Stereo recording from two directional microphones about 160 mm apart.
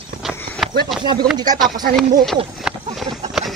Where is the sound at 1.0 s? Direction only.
25° right (ahead or behind).